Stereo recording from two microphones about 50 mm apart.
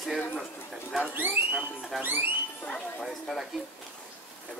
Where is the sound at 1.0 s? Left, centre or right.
Right.